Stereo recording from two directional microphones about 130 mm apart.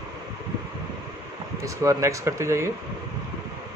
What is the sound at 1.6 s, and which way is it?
A man's voice, 25° right (ahead or behind).